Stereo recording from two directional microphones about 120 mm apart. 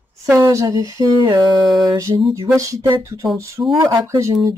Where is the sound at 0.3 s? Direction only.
25° right (ahead or behind).